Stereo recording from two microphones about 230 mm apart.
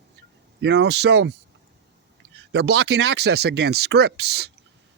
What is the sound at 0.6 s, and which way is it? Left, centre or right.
Speech, right.